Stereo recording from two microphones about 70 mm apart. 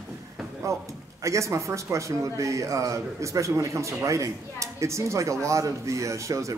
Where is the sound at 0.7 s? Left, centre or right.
Right.